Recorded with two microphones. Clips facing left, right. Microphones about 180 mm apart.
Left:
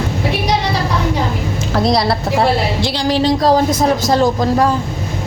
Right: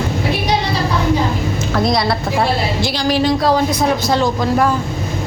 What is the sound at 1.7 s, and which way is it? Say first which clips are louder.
A woman's voice: left 2 dB; 35° left (ahead or behind).